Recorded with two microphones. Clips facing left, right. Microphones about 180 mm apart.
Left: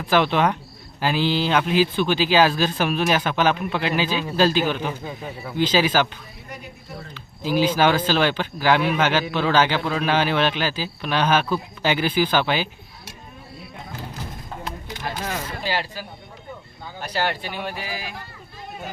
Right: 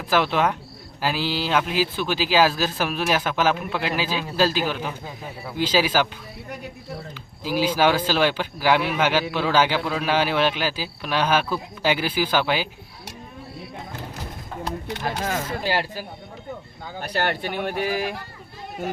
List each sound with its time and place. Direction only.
0.1 s speech: 5° right (ahead or behind)
7.1 s speech: 10° right (ahead or behind)
14.8 s speech: 65° right (ahead or behind)